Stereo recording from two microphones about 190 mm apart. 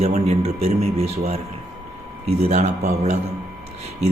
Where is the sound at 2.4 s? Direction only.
35° right (ahead or behind).